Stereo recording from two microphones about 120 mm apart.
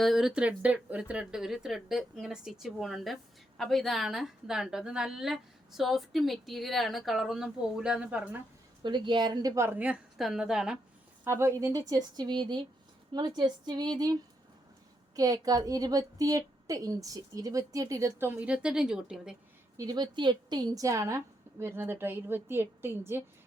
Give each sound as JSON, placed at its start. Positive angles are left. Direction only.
{"t": 0.0, "sound": "a woman's voice", "side_deg": 0}
{"t": 8.8, "sound": "a woman's voice", "side_deg": -40}
{"t": 9.6, "sound": "a woman's voice", "side_deg": -10}
{"t": 11.2, "sound": "speech", "side_deg": -20}
{"t": 11.6, "sound": "a woman's voice", "side_deg": -30}
{"t": 19.7, "sound": "a woman's voice", "side_deg": -30}